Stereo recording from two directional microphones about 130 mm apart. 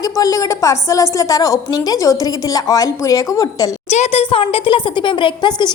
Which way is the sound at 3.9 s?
55° left (ahead or behind).